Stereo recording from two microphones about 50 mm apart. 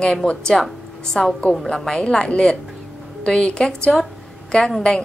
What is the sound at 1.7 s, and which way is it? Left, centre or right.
A woman's voice, centre.